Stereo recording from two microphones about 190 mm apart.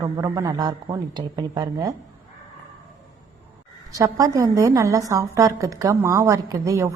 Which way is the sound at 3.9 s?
15° right (ahead or behind).